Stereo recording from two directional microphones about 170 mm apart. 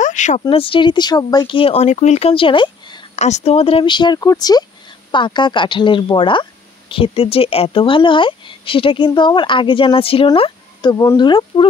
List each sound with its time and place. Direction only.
0.0 s a sound: 45° left (ahead or behind)
0.4 s speech: 30° left (ahead or behind)
3.2 s speech: 40° left (ahead or behind)